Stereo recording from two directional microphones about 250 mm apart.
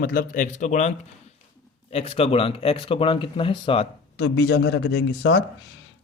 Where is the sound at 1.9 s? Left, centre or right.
Left.